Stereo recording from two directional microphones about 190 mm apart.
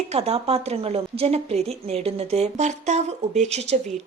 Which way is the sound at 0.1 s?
35° right (ahead or behind).